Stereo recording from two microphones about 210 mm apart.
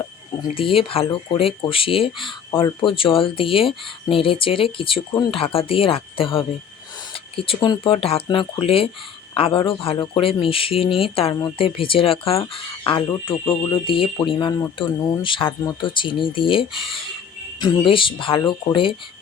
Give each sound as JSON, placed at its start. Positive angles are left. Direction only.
{"t": 0.5, "sound": "speech", "side_deg": 25}